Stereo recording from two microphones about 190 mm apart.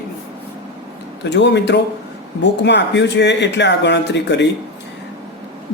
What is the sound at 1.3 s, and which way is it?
Speech, 65° left (ahead or behind).